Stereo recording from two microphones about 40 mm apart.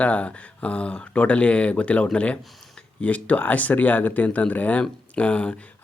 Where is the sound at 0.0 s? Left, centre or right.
Left.